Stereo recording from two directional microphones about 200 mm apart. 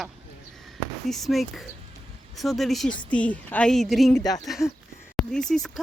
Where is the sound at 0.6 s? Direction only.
Centre (ahead or behind).